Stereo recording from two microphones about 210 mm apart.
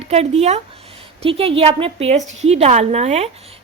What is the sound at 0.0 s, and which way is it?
A woman's voice, 30° right (ahead or behind).